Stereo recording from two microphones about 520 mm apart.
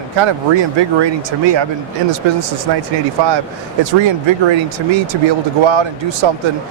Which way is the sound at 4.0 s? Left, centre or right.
Right.